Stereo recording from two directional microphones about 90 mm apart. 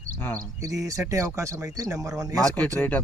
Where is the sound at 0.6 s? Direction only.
40° right (ahead or behind).